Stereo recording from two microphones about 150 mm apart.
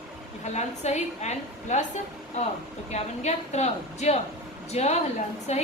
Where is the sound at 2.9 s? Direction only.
50° left (ahead or behind).